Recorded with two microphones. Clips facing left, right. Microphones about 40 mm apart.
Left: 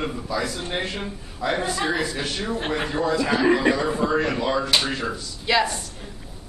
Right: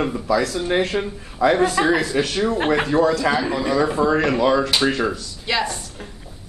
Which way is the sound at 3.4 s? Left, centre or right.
Left.